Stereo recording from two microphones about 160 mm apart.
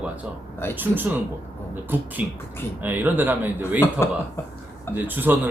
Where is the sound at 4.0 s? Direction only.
15° left (ahead or behind).